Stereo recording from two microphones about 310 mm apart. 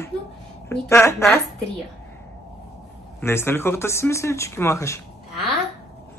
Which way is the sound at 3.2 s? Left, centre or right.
Centre.